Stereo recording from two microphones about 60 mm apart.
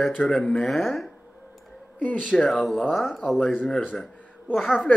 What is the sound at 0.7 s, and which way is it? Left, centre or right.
Speech, centre.